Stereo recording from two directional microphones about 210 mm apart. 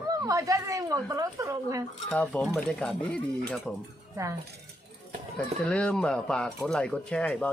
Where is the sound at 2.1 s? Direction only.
5° left (ahead or behind).